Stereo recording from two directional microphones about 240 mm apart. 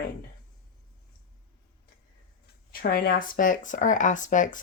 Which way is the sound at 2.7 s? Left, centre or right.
Left.